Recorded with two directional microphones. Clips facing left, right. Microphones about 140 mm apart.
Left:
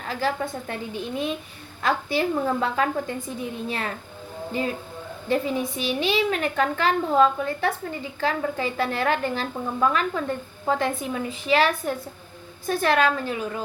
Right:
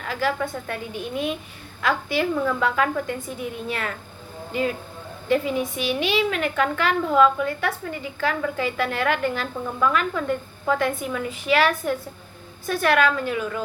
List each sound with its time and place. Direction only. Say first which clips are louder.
0.0 s a woman's voice: right 1 dB; 35° left (ahead or behind)
5.3 s a woman's voice: right 2 dB; 35° left (ahead or behind)